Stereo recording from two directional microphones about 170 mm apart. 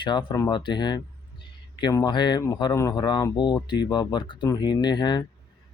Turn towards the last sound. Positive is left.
turn(degrees=25)  # may be behind; listen again after turning